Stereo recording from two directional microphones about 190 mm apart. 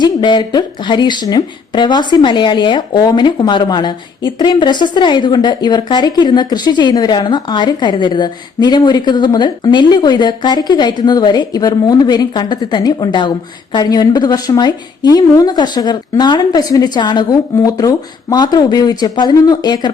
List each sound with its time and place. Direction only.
0.0 s speech: 25° left (ahead or behind)